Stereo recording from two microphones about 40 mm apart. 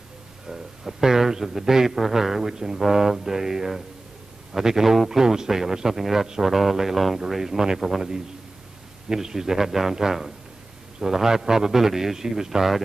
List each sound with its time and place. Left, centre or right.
0.5 s a man's voice: centre
9.1 s a man's voice: centre